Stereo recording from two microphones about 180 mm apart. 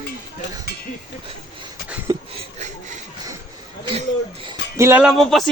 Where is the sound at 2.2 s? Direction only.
30° right (ahead or behind).